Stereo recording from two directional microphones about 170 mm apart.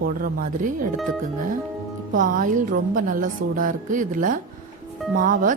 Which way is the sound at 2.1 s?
50° right (ahead or behind).